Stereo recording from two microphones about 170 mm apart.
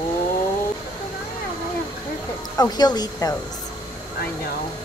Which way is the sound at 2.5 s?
20° left (ahead or behind).